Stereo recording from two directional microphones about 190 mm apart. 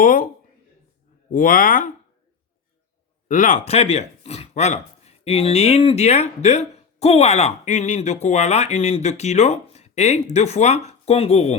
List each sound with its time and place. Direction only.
0.0 s speech: 45° left (ahead or behind)
1.3 s speech: 45° left (ahead or behind)
3.2 s speech: 45° left (ahead or behind)